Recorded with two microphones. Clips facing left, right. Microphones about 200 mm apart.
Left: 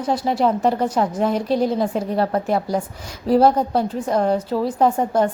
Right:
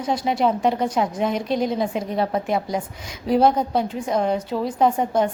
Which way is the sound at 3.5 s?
5° right (ahead or behind).